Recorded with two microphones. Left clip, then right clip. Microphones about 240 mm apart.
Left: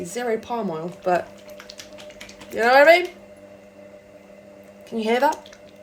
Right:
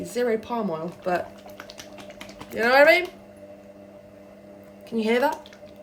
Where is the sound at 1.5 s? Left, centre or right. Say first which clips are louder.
Left 1 dB; right.